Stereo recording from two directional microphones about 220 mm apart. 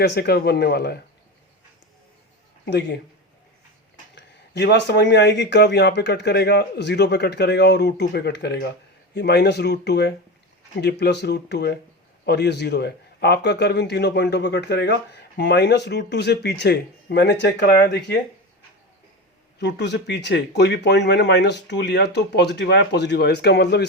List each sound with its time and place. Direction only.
0.0 s a man's voice: 45° left (ahead or behind)
2.6 s a man's voice: 50° left (ahead or behind)
4.1 s a man's voice: 50° left (ahead or behind)
19.5 s a man's voice: 50° left (ahead or behind)